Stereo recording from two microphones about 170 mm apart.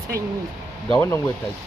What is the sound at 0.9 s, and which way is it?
Speech, 15° left (ahead or behind).